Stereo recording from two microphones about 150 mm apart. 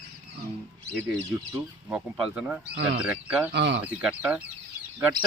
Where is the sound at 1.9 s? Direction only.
5° right (ahead or behind).